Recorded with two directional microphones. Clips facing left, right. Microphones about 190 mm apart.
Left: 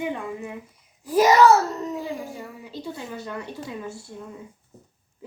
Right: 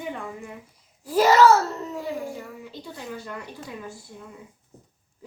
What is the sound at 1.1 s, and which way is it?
Speech, 15° left (ahead or behind).